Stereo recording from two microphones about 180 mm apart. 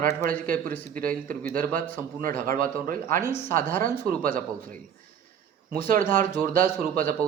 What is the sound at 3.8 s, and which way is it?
A man's voice, 50° right (ahead or behind).